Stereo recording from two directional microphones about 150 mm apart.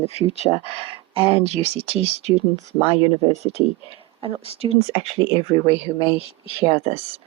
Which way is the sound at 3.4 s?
45° right (ahead or behind).